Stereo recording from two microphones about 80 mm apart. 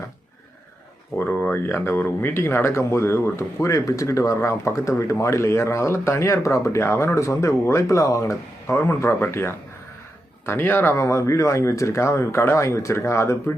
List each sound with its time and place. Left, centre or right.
1.2 s speech: left
10.9 s speech: left